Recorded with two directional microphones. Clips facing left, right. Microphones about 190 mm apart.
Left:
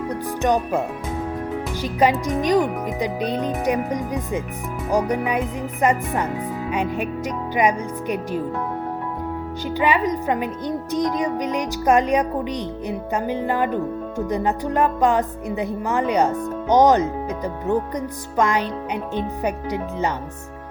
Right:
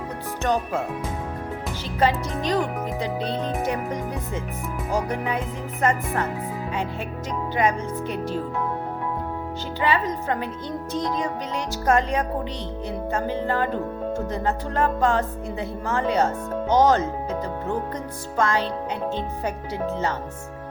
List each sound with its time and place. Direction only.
0.4 s speech: 15° left (ahead or behind)
1.8 s speech: 15° left (ahead or behind)
9.8 s speech: 15° left (ahead or behind)